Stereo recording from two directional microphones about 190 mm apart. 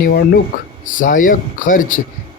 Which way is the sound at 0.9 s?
45° left (ahead or behind).